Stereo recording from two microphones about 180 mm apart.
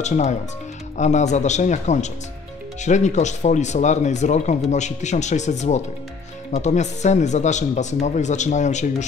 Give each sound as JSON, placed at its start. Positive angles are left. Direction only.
{"t": 0.0, "sound": "speech", "side_deg": 40}